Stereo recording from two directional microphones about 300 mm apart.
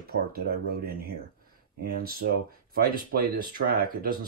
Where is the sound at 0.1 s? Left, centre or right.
Right.